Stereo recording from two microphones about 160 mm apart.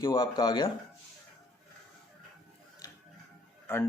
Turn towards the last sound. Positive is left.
turn(degrees=15)  # may be behind; listen again after turning